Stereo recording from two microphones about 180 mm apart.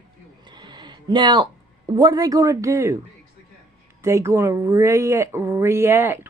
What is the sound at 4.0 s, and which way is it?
Speech, 15° right (ahead or behind).